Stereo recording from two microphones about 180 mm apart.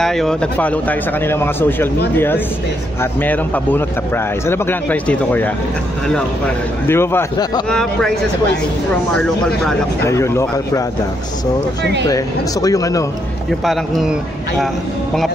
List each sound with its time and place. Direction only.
0.0 s speech: centre (ahead or behind); by 7.6 s 20° left (ahead or behind)
7.7 s speech: 5° left (ahead or behind)
10.0 s speech: 15° left (ahead or behind)
11.8 s speech: 70° right (ahead or behind)
12.6 s a man's voice: 20° left (ahead or behind)
13.5 s speech: centre (ahead or behind)